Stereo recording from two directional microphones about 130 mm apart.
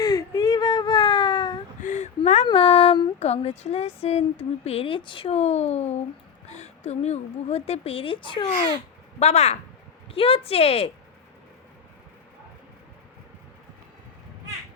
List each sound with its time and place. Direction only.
0.0 s whimper: 30° left (ahead or behind)
1.8 s a sound: 70° left (ahead or behind)
2.5 s a sound: 45° left (ahead or behind)
6.5 s speech: 60° left (ahead or behind); by 8.5 s 40° left (ahead or behind)
9.1 s speech: 60° left (ahead or behind)
10.1 s speech: 45° left (ahead or behind)